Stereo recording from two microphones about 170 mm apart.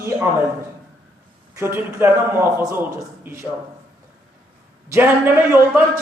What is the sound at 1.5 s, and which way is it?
Speech, 15° right (ahead or behind).